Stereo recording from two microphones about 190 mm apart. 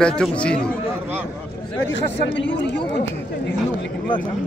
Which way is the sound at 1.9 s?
70° left (ahead or behind).